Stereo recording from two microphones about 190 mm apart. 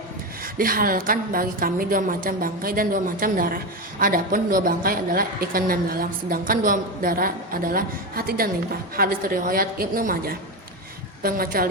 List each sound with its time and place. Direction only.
0.4 s a woman's voice: 50° right (ahead or behind)